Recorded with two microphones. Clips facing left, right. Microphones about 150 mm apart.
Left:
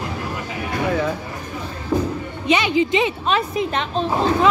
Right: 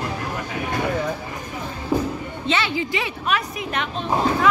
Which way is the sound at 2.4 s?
15° left (ahead or behind).